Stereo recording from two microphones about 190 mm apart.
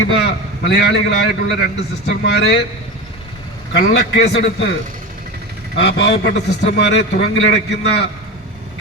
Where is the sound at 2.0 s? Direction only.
60° left (ahead or behind).